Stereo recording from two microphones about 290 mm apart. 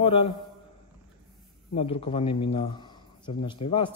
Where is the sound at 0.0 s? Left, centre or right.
Centre.